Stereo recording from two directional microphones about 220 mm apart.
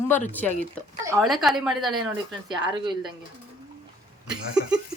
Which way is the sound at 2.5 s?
20° right (ahead or behind).